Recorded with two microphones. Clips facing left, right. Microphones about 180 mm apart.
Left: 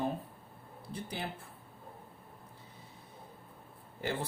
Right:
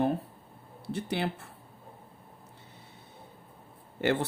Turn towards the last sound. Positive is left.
turn(degrees=-80)